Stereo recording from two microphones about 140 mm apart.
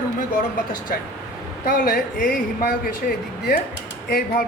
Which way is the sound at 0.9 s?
90° left.